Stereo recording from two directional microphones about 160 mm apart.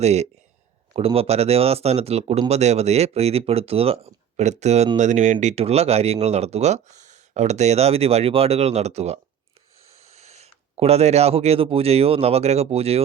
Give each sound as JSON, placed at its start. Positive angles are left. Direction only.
{"t": 0.0, "sound": "speech", "side_deg": -45}